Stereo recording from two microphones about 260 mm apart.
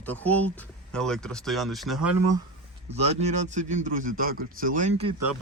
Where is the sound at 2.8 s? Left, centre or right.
Right.